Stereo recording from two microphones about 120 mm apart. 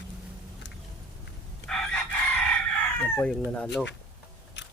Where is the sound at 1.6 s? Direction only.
5° left (ahead or behind).